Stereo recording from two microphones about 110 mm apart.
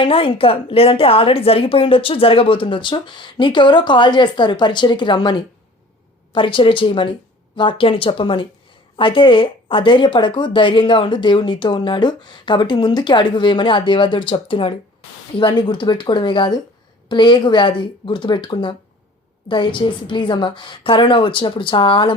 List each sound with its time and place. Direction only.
0.0 s speech: 55° left (ahead or behind)